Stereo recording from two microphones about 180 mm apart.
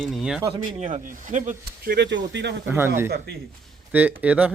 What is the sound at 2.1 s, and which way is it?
Speech, 80° right.